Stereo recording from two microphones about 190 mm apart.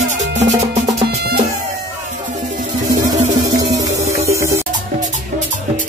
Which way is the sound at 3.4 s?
20° right (ahead or behind).